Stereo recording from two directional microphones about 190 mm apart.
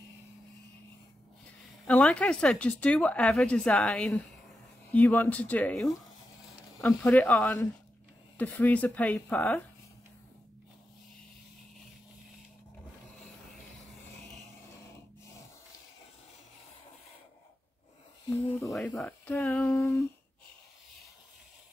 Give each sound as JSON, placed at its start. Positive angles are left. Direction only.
{"t": 1.9, "sound": "speech", "side_deg": 5}
{"t": 18.4, "sound": "speech", "side_deg": 5}
{"t": 19.8, "sound": "a sound", "side_deg": 15}